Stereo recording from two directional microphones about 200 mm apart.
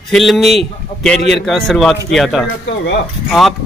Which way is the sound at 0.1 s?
Centre (ahead or behind).